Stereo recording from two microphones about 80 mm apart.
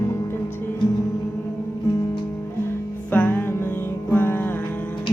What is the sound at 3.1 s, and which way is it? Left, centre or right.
Music, left.